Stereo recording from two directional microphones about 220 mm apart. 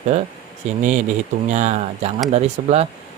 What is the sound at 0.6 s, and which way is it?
Speech, 30° right (ahead or behind).